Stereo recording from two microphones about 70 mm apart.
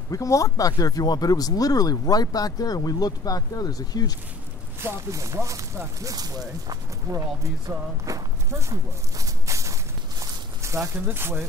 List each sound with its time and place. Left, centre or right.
0.1 s speech: left
4.7 s speech: right
5.1 s speech: right
9.2 s walk: right
10.6 s a sound: right
11.1 s speech: right